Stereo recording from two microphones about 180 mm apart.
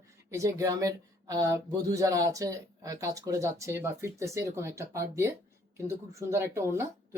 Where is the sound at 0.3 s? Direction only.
15° right (ahead or behind).